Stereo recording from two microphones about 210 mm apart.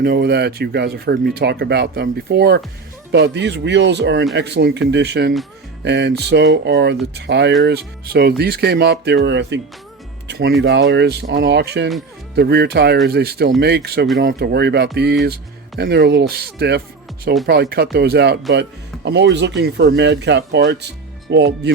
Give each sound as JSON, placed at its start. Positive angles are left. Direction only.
{"t": 0.0, "sound": "speech", "side_deg": -50}